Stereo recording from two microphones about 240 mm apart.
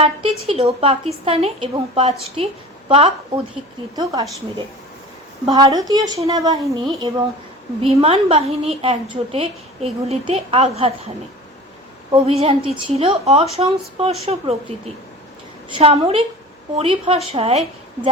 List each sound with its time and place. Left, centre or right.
0.0 s a woman's voice: right
12.1 s a woman's voice: right
15.7 s a woman's voice: right